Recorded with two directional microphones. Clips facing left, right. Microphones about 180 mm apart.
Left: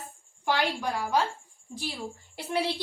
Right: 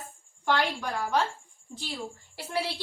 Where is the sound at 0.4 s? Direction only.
10° left (ahead or behind).